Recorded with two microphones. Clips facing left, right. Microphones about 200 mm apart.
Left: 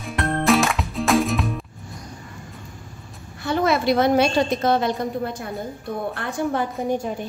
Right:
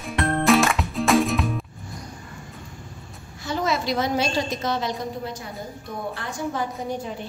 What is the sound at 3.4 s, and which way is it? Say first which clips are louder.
A woman's voice: left 5 dB; 60° left (ahead or behind).